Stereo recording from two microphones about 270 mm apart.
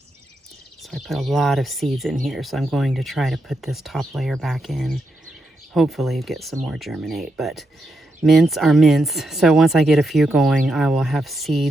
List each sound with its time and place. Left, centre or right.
0.8 s speech: centre